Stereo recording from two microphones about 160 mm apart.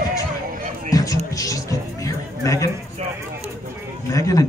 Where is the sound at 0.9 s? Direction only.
20° left (ahead or behind).